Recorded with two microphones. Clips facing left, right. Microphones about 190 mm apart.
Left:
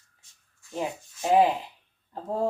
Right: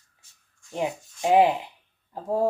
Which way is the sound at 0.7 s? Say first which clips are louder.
Right 3 dB; 15° right (ahead or behind).